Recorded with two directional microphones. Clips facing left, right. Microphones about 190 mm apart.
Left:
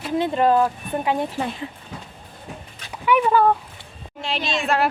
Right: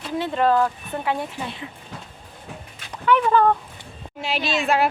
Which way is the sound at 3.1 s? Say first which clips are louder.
Even; 10° left (ahead or behind).